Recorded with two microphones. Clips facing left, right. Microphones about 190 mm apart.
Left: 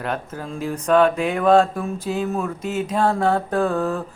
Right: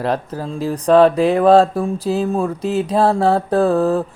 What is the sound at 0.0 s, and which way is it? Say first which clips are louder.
Speech: right 6 dB; 35° right (ahead or behind).